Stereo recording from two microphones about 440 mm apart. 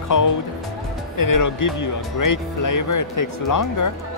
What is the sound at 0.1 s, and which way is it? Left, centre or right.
Speech, left.